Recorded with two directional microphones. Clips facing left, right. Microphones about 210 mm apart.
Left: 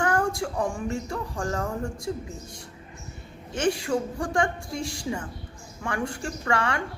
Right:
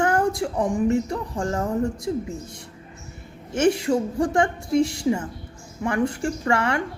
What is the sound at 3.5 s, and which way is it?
Speech, 25° right (ahead or behind).